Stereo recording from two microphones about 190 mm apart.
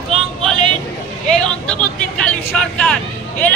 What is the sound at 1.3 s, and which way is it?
Vehicle, 5° left (ahead or behind).